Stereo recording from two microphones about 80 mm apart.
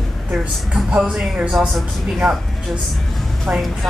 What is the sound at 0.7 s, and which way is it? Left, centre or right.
Speech, centre.